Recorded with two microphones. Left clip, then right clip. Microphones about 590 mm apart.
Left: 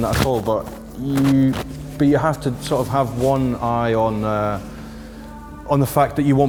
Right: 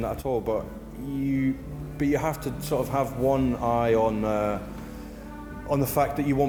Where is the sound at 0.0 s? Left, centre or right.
Left.